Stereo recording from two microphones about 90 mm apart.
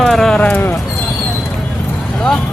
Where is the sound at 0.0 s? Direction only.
5° left (ahead or behind); by 0.8 s 20° left (ahead or behind).